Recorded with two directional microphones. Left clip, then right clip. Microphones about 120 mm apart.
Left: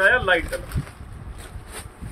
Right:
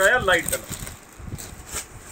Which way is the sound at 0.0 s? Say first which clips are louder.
Left 1 dB; 5° left (ahead or behind).